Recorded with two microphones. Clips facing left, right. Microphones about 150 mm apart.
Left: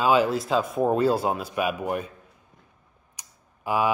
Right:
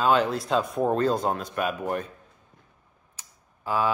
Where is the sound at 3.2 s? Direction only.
15° left (ahead or behind).